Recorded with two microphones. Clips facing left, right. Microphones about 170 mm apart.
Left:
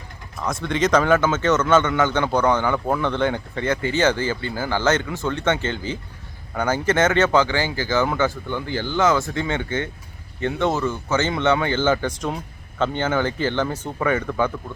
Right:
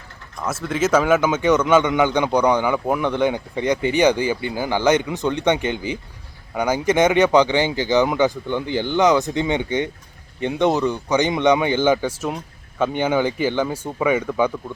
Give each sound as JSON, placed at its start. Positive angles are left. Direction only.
{"t": 0.3, "sound": "speech", "side_deg": -5}